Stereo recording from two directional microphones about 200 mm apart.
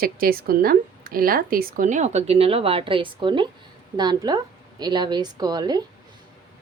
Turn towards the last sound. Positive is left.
turn(degrees=-20)  # may be behind; listen again after turning